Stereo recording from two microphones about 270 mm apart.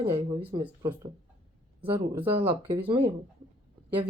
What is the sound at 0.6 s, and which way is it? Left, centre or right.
Speech, centre.